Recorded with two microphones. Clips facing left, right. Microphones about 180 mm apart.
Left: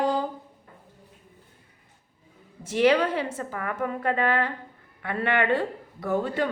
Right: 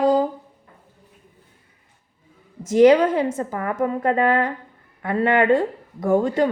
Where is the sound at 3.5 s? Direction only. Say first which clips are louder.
Right 6 dB; 30° right (ahead or behind).